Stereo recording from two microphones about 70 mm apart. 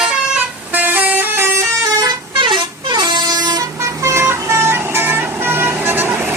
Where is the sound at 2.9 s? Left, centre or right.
Right.